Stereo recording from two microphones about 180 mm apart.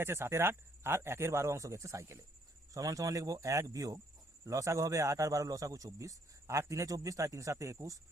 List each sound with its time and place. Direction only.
0.0 s a man's voice: 15° right (ahead or behind)